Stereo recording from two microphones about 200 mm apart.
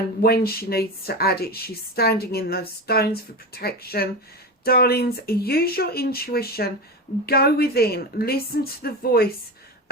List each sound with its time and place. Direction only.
0.2 s speech: 50° left (ahead or behind)